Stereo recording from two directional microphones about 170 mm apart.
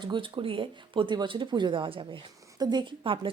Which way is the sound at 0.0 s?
30° right (ahead or behind).